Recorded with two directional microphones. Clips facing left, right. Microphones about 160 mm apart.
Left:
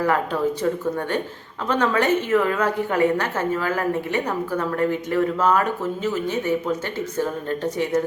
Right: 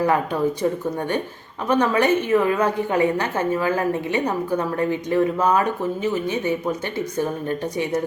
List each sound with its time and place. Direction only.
0.0 s a woman's voice: 15° right (ahead or behind)